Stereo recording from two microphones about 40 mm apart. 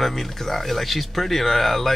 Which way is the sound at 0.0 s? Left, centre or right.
Centre.